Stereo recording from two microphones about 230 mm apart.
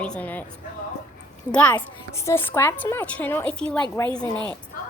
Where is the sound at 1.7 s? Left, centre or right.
Centre.